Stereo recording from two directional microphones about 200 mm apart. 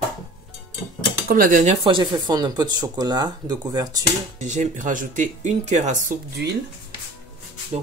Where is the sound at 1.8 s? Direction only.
25° right (ahead or behind).